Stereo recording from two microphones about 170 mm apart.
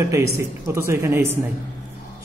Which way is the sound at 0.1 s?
15° right (ahead or behind).